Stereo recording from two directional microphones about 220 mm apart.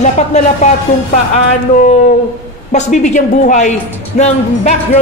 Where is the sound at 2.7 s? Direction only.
30° left (ahead or behind).